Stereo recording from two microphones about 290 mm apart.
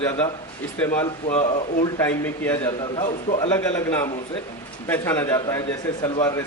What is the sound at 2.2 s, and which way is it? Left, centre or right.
A man's voice, centre.